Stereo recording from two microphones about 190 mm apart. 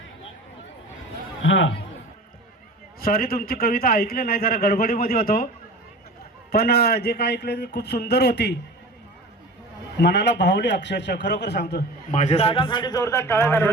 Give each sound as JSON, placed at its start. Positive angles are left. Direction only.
{"t": 1.4, "sound": "a man's voice", "side_deg": 85}
{"t": 3.0, "sound": "a man's voice", "side_deg": 50}
{"t": 6.5, "sound": "a man's voice", "side_deg": 55}
{"t": 10.0, "sound": "a man's voice", "side_deg": 60}
{"t": 12.1, "sound": "a man's voice", "side_deg": 35}